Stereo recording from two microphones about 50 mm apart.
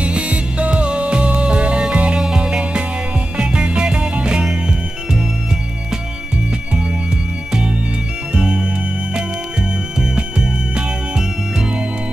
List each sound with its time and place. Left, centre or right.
0.0 s music: right
8.4 s music: centre
9.9 s music: centre